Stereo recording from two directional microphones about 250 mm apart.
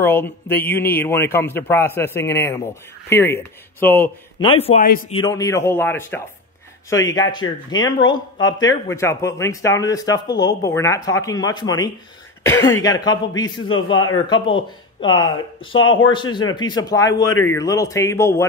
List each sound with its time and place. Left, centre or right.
0.0 s speech: centre
4.4 s speech: left
13.7 s speech: left
14.2 s speech: centre